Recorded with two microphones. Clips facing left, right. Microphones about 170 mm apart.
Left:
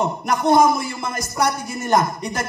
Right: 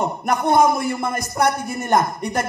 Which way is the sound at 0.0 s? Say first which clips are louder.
Left 1 dB; 55° right (ahead or behind).